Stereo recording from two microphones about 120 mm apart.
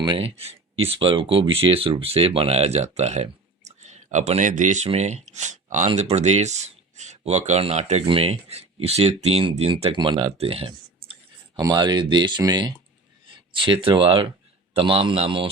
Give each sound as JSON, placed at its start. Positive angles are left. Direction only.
{"t": 0.0, "sound": "speech", "side_deg": -40}
{"t": 0.3, "sound": "speech", "side_deg": -55}
{"t": 4.9, "sound": "speech", "side_deg": -70}
{"t": 6.0, "sound": "speech", "side_deg": -70}
{"t": 8.0, "sound": "speech", "side_deg": -50}
{"t": 11.5, "sound": "speech", "side_deg": -35}